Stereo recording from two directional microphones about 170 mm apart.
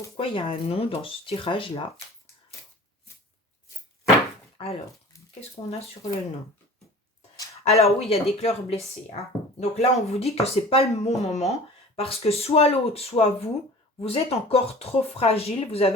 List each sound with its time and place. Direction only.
0.2 s speech: 35° left (ahead or behind)
4.5 s speech: 35° left (ahead or behind)
7.6 s speech: 35° left (ahead or behind)